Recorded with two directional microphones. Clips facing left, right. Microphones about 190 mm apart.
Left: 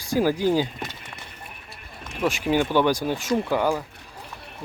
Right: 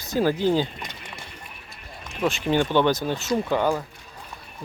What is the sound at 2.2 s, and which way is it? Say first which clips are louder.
Speech: even; 10° left (ahead or behind).